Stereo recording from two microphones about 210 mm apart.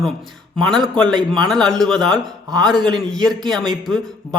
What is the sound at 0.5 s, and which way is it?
A man's voice, centre (ahead or behind).